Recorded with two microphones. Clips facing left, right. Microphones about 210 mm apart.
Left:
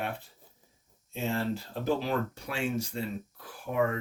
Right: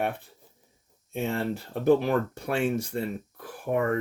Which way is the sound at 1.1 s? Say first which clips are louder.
Right 2 dB; 55° right (ahead or behind).